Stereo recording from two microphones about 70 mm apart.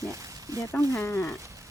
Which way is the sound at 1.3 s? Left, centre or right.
Right.